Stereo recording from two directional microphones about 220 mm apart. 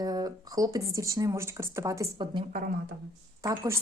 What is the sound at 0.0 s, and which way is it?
Speech, 15° right (ahead or behind).